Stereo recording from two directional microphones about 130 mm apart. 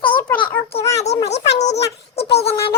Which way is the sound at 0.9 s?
55° left (ahead or behind).